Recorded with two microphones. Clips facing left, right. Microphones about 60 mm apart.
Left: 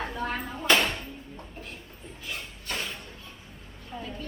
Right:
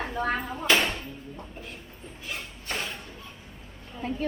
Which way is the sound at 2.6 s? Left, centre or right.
Right.